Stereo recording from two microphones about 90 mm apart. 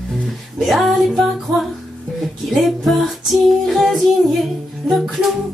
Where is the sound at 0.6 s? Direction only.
Centre (ahead or behind).